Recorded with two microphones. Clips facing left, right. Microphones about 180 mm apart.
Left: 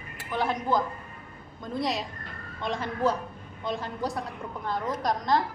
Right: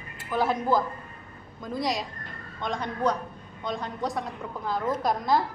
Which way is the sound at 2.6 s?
5° left (ahead or behind).